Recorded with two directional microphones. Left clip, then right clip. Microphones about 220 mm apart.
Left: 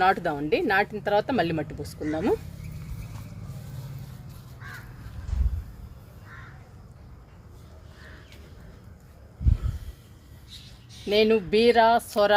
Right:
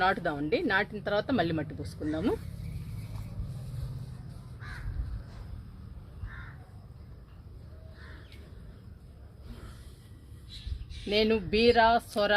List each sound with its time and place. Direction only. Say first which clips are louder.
0.0 s speech: left 5 dB; 25° left (ahead or behind)
11.1 s speech: left 6 dB; 25° left (ahead or behind)